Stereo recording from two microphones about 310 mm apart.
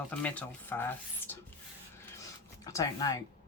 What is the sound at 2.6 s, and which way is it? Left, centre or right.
Speech, centre.